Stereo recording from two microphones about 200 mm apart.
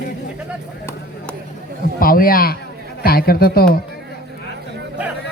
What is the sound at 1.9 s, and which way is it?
Speech, 45° left (ahead or behind).